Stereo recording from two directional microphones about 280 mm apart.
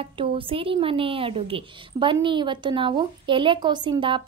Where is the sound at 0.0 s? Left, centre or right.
Centre.